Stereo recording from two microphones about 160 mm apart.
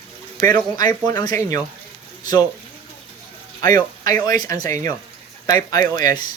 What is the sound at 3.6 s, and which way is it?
Speech, 25° left (ahead or behind).